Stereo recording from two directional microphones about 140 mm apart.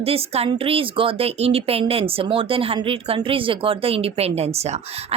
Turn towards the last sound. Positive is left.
turn(degrees=-50)  # may be behind; listen again after turning